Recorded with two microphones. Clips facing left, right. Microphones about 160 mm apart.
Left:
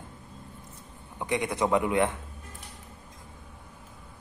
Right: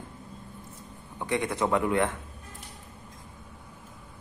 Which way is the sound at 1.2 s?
15° left (ahead or behind).